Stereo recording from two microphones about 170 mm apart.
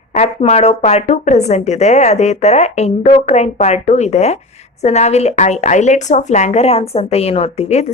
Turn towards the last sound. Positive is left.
turn(degrees=40)  # may be behind; listen again after turning